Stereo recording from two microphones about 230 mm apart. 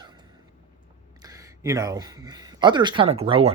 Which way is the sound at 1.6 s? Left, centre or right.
Centre.